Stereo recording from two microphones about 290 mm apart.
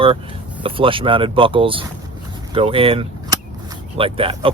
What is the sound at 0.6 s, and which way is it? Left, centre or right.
Speech, centre.